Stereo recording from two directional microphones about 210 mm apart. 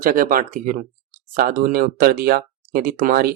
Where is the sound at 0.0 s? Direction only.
40° right (ahead or behind).